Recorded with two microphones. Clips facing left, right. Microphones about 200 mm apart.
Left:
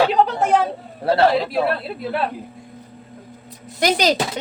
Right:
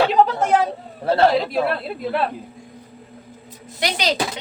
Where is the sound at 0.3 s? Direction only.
Centre (ahead or behind).